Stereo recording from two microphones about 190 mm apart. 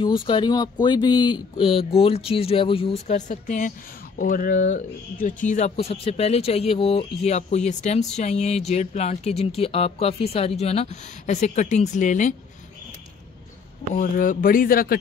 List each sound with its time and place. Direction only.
0.0 s speech: 25° left (ahead or behind)
13.9 s speech: 45° left (ahead or behind)